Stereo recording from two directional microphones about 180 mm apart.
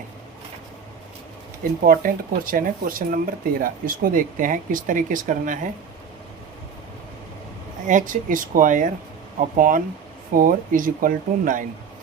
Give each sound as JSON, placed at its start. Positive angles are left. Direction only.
{"t": 1.8, "sound": "speech", "side_deg": -50}
{"t": 7.9, "sound": "speech", "side_deg": -45}